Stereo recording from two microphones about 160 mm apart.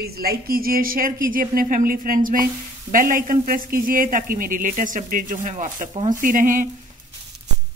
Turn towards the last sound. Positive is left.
turn(degrees=-55)  # may be behind; listen again after turning